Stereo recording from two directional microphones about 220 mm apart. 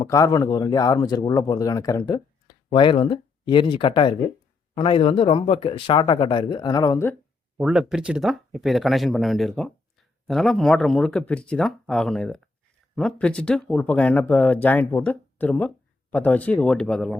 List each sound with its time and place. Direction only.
0.0 s speech: 15° left (ahead or behind)
7.6 s speech: centre (ahead or behind)